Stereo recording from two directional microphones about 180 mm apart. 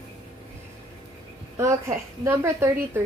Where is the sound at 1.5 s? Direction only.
15° right (ahead or behind).